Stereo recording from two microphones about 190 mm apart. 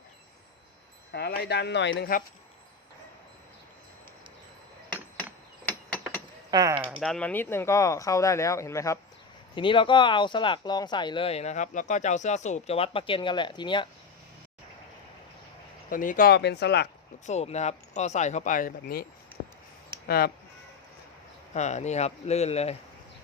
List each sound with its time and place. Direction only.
1.1 s speech: 60° left (ahead or behind)
6.5 s speech: 20° right (ahead or behind)
6.9 s speech: centre (ahead or behind)
9.6 s speech: 25° left (ahead or behind)
15.9 s speech: 45° left (ahead or behind)
17.2 s speech: 35° left (ahead or behind)
20.1 s speech: 55° left (ahead or behind)
21.5 s speech: 35° left (ahead or behind)